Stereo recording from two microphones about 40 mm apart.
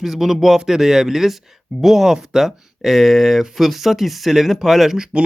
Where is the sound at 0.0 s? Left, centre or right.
Centre.